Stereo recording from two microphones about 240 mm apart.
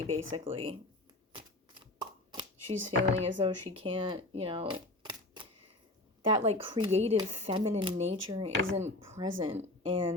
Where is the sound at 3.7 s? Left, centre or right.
Right.